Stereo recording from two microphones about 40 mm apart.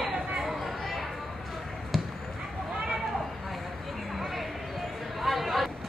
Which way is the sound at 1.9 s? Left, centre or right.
Centre.